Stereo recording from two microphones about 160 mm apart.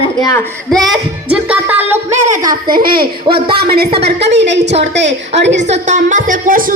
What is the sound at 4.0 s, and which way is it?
A woman's voice, 90° right.